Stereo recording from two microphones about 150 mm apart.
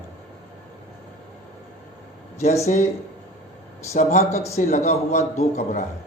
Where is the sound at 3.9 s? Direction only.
50° left (ahead or behind).